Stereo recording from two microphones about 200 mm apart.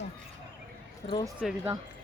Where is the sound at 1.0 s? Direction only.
35° left (ahead or behind).